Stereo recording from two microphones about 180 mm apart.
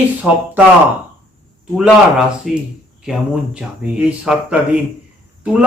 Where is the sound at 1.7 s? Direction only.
5° right (ahead or behind).